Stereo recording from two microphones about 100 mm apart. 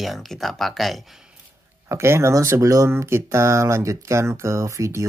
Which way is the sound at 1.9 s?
25° right (ahead or behind).